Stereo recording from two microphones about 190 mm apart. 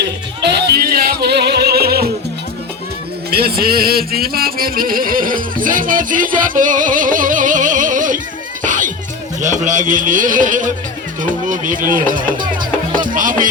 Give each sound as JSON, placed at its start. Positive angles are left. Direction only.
{"t": 0.0, "sound": "music", "side_deg": -60}
{"t": 3.2, "sound": "music", "side_deg": -55}
{"t": 9.4, "sound": "a man's voice", "side_deg": -40}
{"t": 13.1, "sound": "music", "side_deg": -45}